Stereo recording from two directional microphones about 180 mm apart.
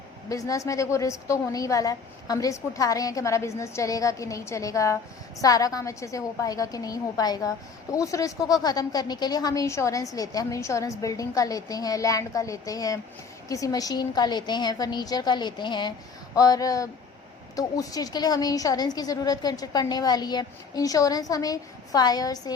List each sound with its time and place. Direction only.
0.3 s a woman's voice: 20° left (ahead or behind)